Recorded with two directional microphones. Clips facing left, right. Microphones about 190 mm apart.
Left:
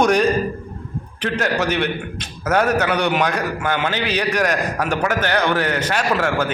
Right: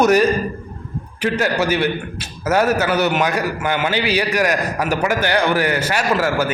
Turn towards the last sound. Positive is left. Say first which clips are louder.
# right 1 dB
turn(degrees=-5)  # may be behind; listen again after turning